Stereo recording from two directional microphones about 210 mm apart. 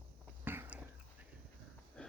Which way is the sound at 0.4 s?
10° right (ahead or behind).